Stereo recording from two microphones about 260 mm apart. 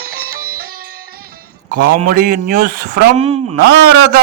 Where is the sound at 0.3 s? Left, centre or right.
Right.